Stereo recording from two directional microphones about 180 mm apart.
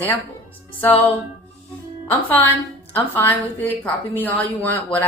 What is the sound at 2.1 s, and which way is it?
A woman's voice, 10° left (ahead or behind).